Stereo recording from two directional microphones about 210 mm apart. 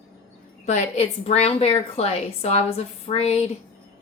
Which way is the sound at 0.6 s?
35° left (ahead or behind).